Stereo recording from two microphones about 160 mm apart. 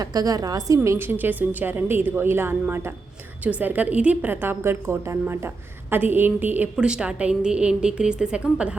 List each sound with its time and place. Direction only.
0.0 s a woman's voice: 25° right (ahead or behind)
0.8 s a woman's voice: 15° right (ahead or behind)